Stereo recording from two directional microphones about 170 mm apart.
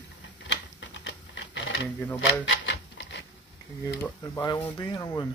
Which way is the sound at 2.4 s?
90° left.